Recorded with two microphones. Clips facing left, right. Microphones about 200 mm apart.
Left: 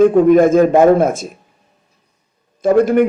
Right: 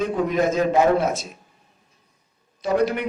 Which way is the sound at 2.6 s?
50° left (ahead or behind).